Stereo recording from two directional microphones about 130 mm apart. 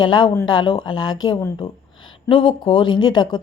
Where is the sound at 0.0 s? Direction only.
35° left (ahead or behind).